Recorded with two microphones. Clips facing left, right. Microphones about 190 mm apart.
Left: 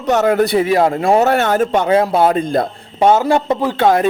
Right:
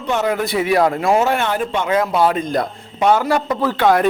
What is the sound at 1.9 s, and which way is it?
A man's voice, 30° left (ahead or behind).